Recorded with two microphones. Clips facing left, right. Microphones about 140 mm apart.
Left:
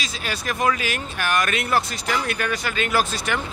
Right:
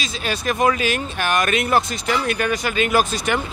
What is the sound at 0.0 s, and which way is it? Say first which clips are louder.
Speech: right 5 dB; 25° right (ahead or behind).